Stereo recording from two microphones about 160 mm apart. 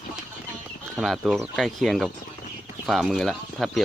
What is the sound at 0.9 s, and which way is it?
Speech, centre (ahead or behind).